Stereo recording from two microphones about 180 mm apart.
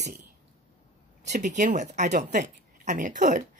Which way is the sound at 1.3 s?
40° right (ahead or behind).